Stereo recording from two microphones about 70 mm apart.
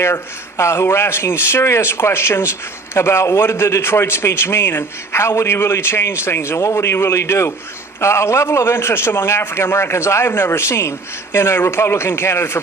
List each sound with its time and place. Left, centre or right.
0.0 s a man's voice: left